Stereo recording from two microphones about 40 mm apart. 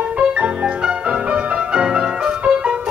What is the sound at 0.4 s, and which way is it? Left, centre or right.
Music, right.